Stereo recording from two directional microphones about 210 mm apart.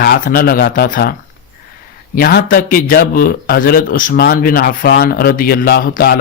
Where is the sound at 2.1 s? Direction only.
45° left (ahead or behind).